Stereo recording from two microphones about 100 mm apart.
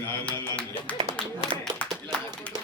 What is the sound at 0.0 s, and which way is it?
Speech, 20° left (ahead or behind).